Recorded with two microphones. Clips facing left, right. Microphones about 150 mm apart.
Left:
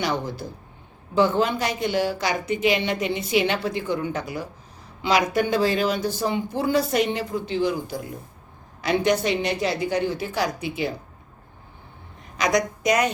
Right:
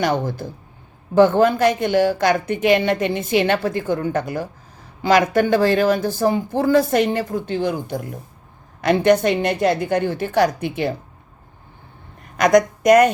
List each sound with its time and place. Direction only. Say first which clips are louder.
0.0 s a woman's voice: right 5 dB; 50° right (ahead or behind)
12.4 s a woman's voice: right 8 dB; 50° right (ahead or behind)